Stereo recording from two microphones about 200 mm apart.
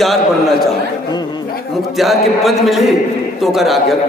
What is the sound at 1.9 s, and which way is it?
A man's voice, centre (ahead or behind).